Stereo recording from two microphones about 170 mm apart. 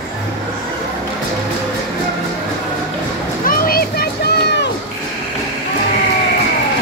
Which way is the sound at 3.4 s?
60° left (ahead or behind).